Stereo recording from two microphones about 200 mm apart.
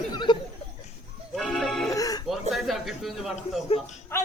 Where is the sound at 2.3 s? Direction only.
Centre (ahead or behind).